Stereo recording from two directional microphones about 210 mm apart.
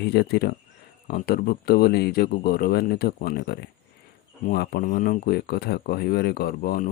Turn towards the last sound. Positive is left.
turn(degrees=45)  # may be behind; listen again after turning